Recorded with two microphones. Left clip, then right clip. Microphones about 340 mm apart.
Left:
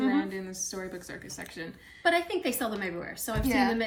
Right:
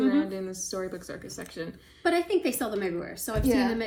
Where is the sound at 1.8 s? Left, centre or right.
Centre.